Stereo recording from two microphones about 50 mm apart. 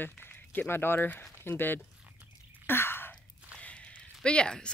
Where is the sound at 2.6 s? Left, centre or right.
Left.